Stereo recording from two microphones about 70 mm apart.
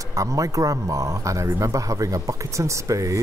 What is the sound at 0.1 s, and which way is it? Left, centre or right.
Speech, right.